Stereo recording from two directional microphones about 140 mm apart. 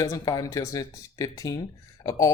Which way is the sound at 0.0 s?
25° left (ahead or behind).